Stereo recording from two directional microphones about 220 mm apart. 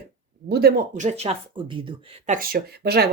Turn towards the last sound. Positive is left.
turn(degrees=-45)  # may be behind; listen again after turning